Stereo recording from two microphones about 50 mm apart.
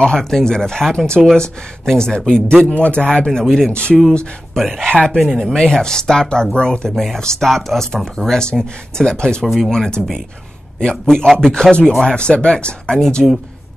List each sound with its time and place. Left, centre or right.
0.0 s a man's voice: centre
3.3 s speech: centre
3.7 s a man's voice: left
4.6 s speech: centre
4.9 s speech: centre
5.2 s speech: centre
5.5 s speech: centre
7.3 s speech: centre